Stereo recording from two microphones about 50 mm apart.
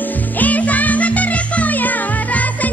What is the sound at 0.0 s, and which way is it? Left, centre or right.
Music, left.